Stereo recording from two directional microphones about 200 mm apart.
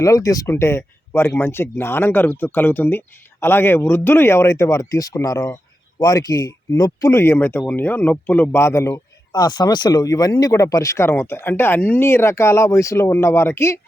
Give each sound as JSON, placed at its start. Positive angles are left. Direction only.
{"t": 0.0, "sound": "speech", "side_deg": 15}